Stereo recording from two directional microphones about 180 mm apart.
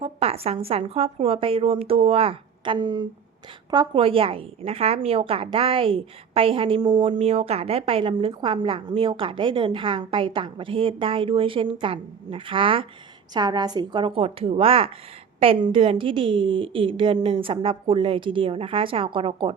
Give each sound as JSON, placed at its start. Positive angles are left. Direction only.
{"t": 0.0, "sound": "a woman's voice", "side_deg": -35}
{"t": 7.1, "sound": "a woman's voice", "side_deg": -35}